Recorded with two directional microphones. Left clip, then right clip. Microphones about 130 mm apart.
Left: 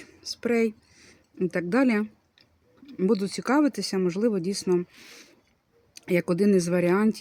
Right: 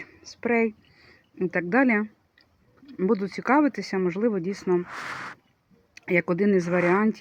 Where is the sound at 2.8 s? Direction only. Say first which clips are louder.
Even; 35° left (ahead or behind).